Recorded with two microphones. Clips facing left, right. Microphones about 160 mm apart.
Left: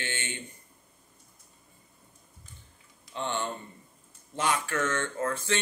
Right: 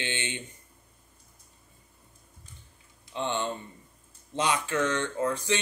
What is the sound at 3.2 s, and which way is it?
Speech, 15° right (ahead or behind).